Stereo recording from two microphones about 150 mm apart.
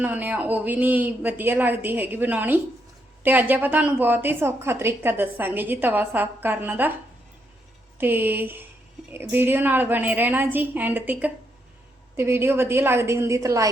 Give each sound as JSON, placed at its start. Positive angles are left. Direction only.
{"t": 0.0, "sound": "a woman's voice", "side_deg": -10}
{"t": 7.9, "sound": "a woman's voice", "side_deg": -15}